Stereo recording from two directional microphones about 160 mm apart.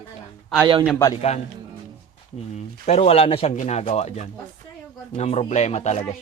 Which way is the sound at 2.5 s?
40° left (ahead or behind).